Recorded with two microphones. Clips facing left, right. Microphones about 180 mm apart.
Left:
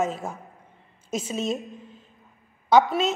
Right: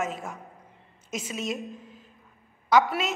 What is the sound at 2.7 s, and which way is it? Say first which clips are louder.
Speech: left 3 dB; 25° left (ahead or behind).